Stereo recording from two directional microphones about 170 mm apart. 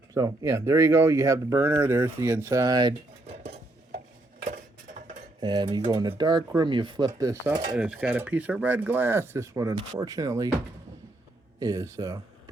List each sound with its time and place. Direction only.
0.1 s speech: 20° right (ahead or behind)
4.4 s a sound: 50° right (ahead or behind)
5.4 s speech: 25° right (ahead or behind)
7.8 s speech: 5° right (ahead or behind)
11.6 s speech: 20° right (ahead or behind)